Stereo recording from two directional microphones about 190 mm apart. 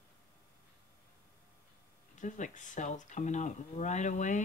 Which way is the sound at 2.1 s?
40° left (ahead or behind).